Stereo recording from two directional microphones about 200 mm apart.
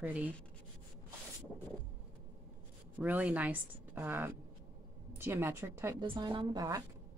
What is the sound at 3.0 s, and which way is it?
Speech, 10° right (ahead or behind).